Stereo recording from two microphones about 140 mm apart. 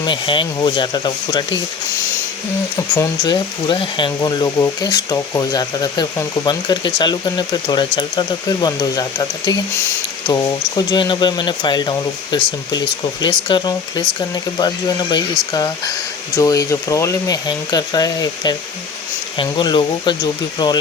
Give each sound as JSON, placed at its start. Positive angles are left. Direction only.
{"t": 0.0, "sound": "speech", "side_deg": 35}
{"t": 2.7, "sound": "speech", "side_deg": 20}
{"t": 10.8, "sound": "speech", "side_deg": 35}